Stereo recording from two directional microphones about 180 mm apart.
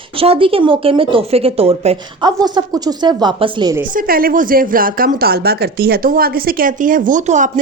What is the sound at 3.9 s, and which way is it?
Speech, 55° right (ahead or behind).